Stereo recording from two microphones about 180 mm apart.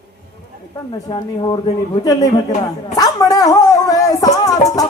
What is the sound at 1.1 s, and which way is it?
A man's voice, 25° left (ahead or behind).